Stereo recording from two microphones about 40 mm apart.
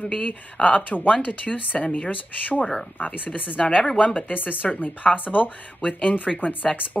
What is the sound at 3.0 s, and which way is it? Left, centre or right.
Speech, left.